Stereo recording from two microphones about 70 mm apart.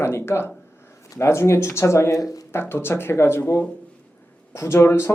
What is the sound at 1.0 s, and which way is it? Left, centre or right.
Speech, left.